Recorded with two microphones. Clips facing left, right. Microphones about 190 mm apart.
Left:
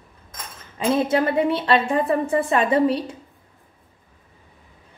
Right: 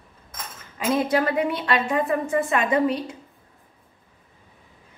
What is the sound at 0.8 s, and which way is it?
A woman's voice, 25° left (ahead or behind).